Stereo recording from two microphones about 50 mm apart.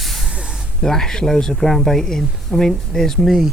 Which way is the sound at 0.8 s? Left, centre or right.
Centre.